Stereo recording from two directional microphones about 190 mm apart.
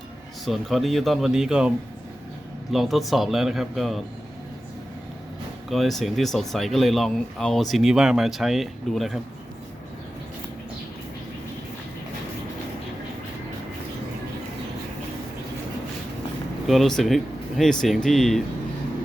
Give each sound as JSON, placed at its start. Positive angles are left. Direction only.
{"t": 0.4, "sound": "speech", "side_deg": 0}
{"t": 2.7, "sound": "speech", "side_deg": 0}
{"t": 5.6, "sound": "speech", "side_deg": 0}
{"t": 16.6, "sound": "speech", "side_deg": 0}